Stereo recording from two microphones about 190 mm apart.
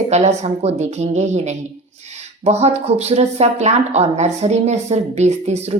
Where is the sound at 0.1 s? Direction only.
35° right (ahead or behind).